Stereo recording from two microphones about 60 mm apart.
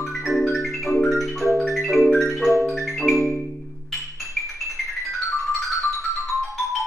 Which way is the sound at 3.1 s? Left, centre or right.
Left.